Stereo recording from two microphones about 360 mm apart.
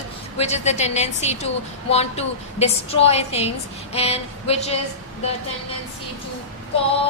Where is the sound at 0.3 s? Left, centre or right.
Centre.